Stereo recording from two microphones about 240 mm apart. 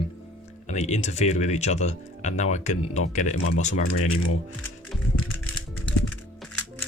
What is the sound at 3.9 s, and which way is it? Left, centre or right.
Speech, left.